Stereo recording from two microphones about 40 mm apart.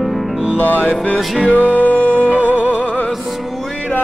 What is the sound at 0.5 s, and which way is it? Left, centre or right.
Music, left.